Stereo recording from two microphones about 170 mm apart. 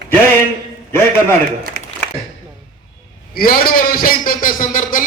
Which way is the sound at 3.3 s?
60° left (ahead or behind).